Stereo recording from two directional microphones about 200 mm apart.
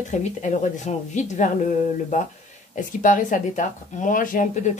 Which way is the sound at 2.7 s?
40° left (ahead or behind).